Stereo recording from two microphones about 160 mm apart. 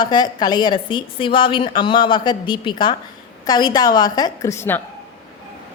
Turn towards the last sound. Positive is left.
turn(degrees=15)  # may be behind; listen again after turning